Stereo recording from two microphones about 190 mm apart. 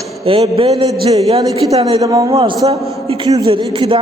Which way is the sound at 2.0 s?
20° right (ahead or behind).